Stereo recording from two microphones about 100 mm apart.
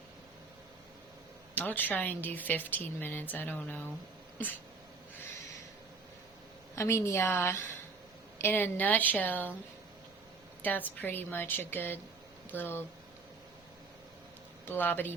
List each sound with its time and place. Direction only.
1.5 s a woman's voice: 15° left (ahead or behind)
6.7 s a woman's voice: 30° left (ahead or behind)
10.6 s a woman's voice: 15° left (ahead or behind)
14.7 s a woman's voice: 20° left (ahead or behind)